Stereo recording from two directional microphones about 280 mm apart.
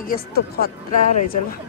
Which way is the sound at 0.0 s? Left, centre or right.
Left.